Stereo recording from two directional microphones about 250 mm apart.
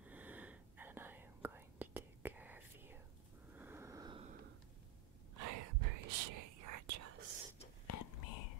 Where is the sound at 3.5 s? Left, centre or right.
Centre.